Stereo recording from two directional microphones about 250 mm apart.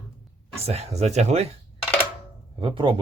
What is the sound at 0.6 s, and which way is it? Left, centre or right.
Speech, right.